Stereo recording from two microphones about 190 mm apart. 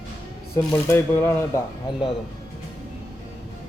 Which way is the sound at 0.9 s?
15° left (ahead or behind).